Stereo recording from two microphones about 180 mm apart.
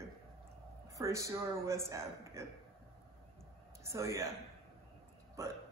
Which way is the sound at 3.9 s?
15° right (ahead or behind).